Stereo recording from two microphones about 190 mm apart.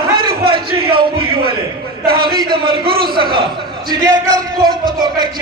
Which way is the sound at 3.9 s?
20° right (ahead or behind).